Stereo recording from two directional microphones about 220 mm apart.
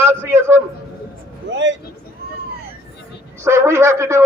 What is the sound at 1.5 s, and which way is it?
Speech, 55° right (ahead or behind).